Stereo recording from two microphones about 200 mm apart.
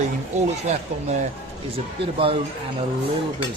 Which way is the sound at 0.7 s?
35° right (ahead or behind).